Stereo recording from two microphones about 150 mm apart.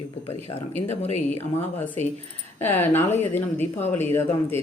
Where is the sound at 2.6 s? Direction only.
15° left (ahead or behind).